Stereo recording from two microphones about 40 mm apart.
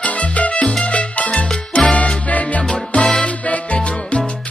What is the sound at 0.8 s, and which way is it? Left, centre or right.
Salsa music, left.